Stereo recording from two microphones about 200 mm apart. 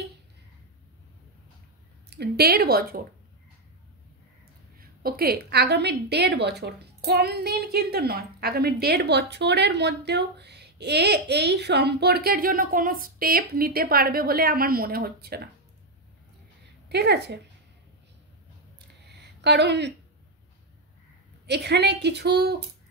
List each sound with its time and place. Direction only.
2.0 s a woman's voice: 55° right (ahead or behind)
4.7 s a woman's voice: 50° right (ahead or behind)
16.9 s a woman's voice: 55° right (ahead or behind)
19.4 s a woman's voice: 55° right (ahead or behind)
21.5 s a woman's voice: 55° right (ahead or behind)